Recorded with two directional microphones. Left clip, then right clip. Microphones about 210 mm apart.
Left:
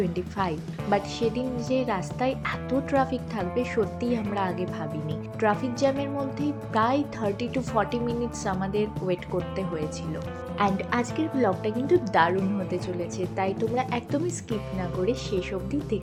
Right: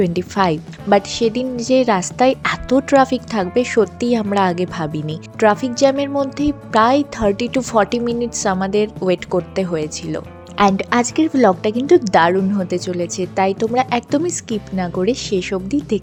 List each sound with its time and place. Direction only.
0.0 s a woman's voice: 50° right (ahead or behind)